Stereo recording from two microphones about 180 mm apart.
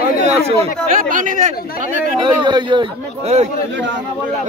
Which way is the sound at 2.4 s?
25° right (ahead or behind).